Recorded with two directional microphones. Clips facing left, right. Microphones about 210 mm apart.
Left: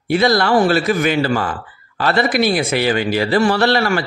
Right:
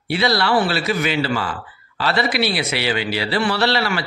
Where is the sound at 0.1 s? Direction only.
45° left (ahead or behind).